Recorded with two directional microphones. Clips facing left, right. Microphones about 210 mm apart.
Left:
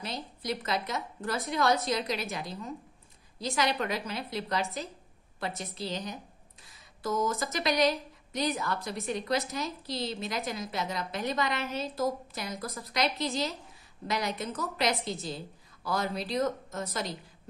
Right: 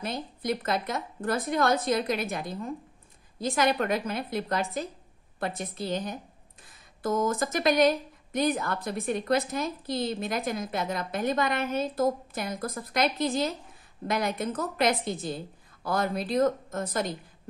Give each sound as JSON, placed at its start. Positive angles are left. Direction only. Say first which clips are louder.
{"t": 0.0, "sound": "speech", "louder": "right 5 dB", "side_deg": -55}